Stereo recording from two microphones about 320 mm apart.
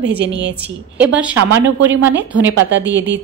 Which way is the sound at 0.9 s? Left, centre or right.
Centre.